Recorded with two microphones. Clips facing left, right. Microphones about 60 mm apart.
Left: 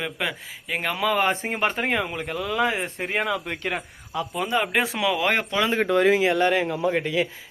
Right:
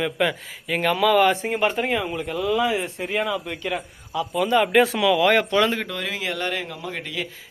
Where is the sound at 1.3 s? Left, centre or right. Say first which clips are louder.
Right 3 dB; left.